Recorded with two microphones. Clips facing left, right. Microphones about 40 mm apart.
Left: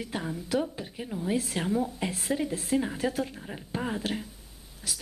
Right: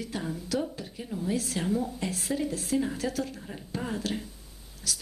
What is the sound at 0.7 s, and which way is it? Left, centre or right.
A woman's voice, left.